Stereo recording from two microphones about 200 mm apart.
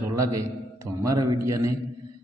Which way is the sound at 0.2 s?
15° right (ahead or behind).